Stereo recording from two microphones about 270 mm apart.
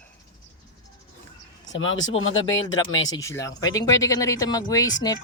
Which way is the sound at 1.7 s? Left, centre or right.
Centre.